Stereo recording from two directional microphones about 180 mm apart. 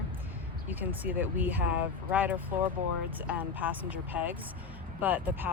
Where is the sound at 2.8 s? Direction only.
40° right (ahead or behind).